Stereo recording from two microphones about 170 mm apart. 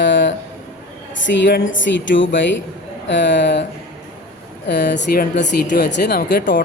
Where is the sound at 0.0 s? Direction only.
90° left.